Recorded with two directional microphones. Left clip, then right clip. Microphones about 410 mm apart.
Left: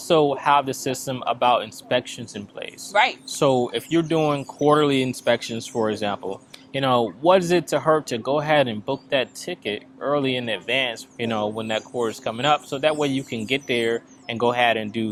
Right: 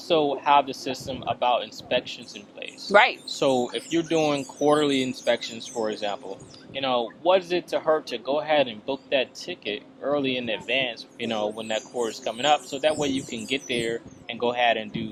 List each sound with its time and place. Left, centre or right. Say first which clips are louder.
0.1 s speech: left 2 dB; left
2.9 s speech: right 2 dB; right
3.3 s speech: left 3 dB; left